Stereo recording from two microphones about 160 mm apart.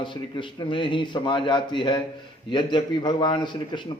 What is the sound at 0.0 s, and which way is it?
A man's voice, 30° left (ahead or behind).